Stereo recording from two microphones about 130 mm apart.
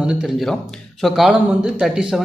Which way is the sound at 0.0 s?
5° right (ahead or behind).